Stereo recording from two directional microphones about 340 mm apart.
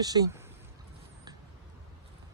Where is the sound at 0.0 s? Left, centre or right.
Centre.